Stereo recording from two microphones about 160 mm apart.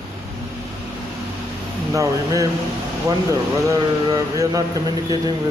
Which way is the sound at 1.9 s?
20° right (ahead or behind).